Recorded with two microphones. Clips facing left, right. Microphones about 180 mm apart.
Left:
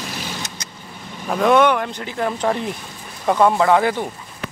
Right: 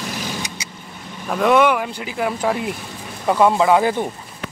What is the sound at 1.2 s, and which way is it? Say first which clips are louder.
Speech: even; centre (ahead or behind).